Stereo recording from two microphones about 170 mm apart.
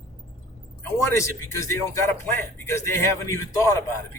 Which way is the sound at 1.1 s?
15° left (ahead or behind).